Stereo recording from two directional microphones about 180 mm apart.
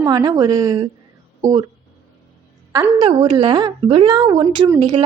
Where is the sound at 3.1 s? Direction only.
25° right (ahead or behind).